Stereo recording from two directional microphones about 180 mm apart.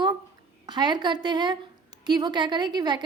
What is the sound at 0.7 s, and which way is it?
A woman's voice, 25° right (ahead or behind).